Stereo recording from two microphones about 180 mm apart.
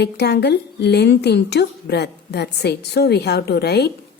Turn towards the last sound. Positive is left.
turn(degrees=65)  # may be behind; listen again after turning